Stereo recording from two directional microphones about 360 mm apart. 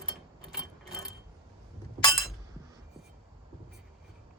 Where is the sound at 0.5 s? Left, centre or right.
Centre.